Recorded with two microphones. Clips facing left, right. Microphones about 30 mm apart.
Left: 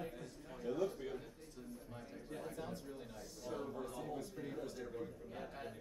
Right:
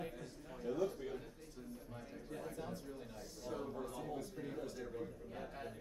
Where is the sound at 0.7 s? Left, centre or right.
Centre.